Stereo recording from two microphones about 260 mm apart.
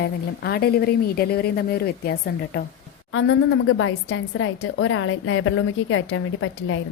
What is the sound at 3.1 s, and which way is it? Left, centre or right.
A woman's voice, left.